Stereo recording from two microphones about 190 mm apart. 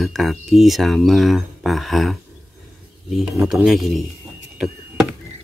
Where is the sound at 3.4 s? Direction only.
Centre (ahead or behind).